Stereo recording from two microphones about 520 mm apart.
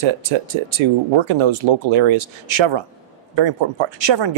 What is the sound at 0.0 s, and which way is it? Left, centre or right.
Speech, right.